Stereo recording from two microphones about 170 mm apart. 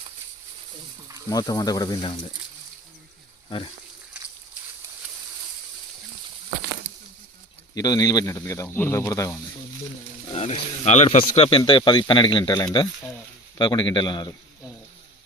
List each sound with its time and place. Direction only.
1.3 s speech: 20° left (ahead or behind)
7.8 s speech: 20° left (ahead or behind)
10.3 s speech: 40° left (ahead or behind)